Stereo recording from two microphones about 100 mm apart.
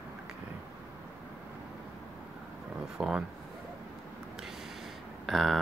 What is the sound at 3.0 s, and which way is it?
Speech, 10° right (ahead or behind).